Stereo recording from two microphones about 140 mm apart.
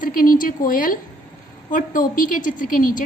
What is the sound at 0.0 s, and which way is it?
A woman's voice, 85° left.